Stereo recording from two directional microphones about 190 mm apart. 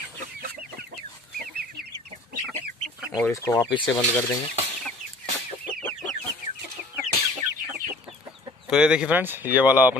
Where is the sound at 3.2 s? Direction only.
15° left (ahead or behind).